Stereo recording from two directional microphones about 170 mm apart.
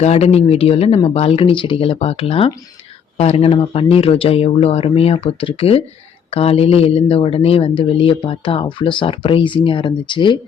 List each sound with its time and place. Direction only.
0.0 s speech: 40° left (ahead or behind)